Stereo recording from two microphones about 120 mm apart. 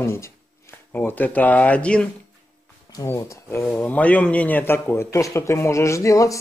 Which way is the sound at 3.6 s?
15° left (ahead or behind).